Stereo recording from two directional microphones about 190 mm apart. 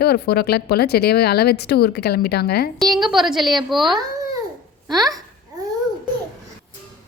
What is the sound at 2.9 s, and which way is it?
A woman's voice, centre (ahead or behind).